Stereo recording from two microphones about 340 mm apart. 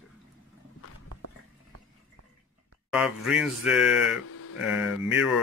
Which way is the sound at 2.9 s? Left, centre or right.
Centre.